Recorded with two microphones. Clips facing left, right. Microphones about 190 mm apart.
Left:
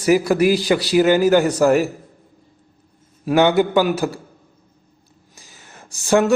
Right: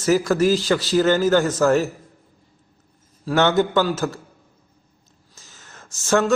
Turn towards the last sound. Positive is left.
turn(degrees=15)  # may be behind; listen again after turning